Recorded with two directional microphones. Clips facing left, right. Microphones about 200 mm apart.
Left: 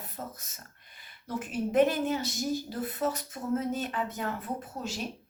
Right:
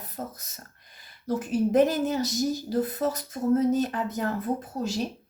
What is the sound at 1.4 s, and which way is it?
Speech, 40° right (ahead or behind).